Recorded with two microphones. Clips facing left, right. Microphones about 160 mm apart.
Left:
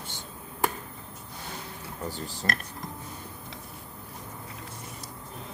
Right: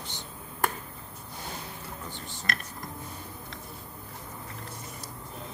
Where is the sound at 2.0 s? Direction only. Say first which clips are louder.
Left 6 dB; 35° left (ahead or behind).